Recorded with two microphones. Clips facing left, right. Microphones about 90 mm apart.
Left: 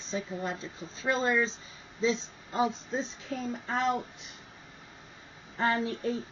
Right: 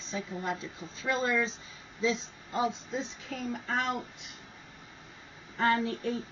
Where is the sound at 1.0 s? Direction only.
25° left (ahead or behind).